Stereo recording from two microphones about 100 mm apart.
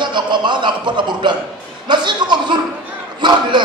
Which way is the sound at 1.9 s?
50° right (ahead or behind).